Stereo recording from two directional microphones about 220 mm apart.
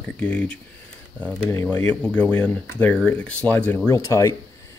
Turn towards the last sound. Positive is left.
turn(degrees=15)  # may be behind; listen again after turning